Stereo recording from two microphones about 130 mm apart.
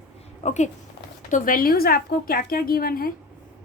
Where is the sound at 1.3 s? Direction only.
90° left.